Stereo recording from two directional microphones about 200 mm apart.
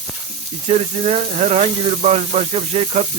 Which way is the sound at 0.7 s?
35° right (ahead or behind).